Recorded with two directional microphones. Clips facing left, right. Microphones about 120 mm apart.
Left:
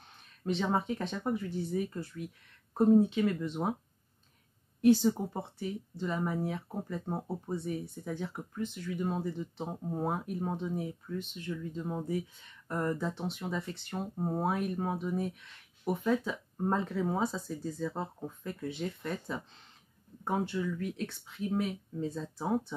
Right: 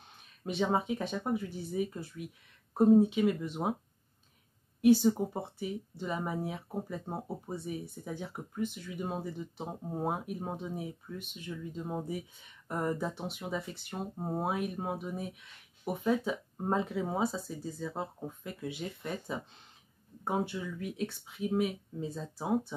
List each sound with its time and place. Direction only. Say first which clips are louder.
0.5 s speech: even; 10° right (ahead or behind)
4.8 s speech: right 1 dB; 10° right (ahead or behind)